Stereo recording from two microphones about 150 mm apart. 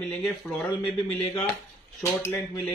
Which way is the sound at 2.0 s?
20° left (ahead or behind).